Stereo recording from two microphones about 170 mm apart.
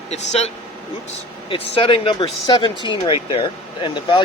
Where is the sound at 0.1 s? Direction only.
40° left (ahead or behind).